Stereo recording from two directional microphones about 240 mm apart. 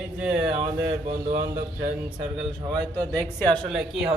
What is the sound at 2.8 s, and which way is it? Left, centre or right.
Speech, centre.